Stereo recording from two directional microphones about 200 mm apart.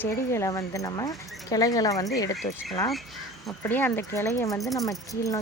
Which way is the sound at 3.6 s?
10° left (ahead or behind).